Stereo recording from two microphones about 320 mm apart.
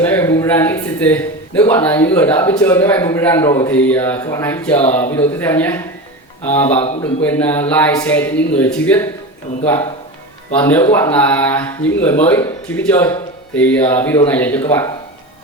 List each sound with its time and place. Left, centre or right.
0.0 s a sound: centre
0.3 s a man's voice: centre
6.8 s a man's voice: centre
7.2 s a man's voice: centre
10.5 s a man's voice: centre